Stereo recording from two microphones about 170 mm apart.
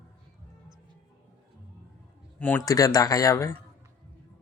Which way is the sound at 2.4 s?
10° left (ahead or behind).